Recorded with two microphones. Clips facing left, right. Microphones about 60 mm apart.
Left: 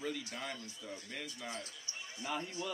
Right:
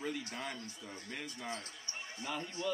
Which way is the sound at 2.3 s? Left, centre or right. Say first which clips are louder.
Right 1 dB; centre.